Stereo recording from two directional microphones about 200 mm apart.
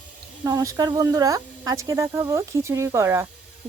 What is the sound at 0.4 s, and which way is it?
Speech, 15° right (ahead or behind).